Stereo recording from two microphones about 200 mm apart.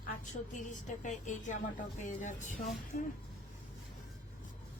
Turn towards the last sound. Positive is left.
turn(degrees=45)  # may be behind; listen again after turning